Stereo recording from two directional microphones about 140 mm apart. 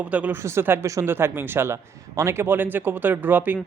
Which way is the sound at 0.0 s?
10° right (ahead or behind).